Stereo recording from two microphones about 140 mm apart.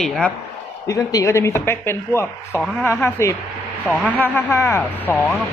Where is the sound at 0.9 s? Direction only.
25° left (ahead or behind).